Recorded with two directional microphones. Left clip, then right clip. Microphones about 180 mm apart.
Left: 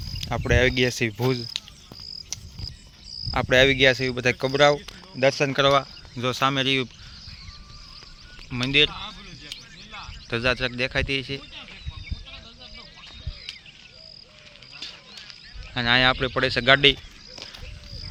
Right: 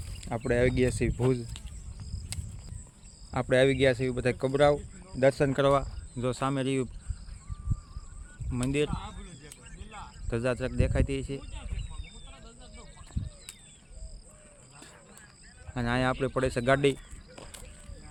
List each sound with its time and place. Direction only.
0.2 s speech: centre (ahead or behind)
3.3 s speech: centre (ahead or behind)
5.2 s speech: 20° right (ahead or behind)
5.8 s speech: 5° left (ahead or behind)
8.4 s speech: centre (ahead or behind)
8.9 s a sound: 65° right (ahead or behind)
10.2 s speech: 5° right (ahead or behind)
15.7 s speech: 10° right (ahead or behind)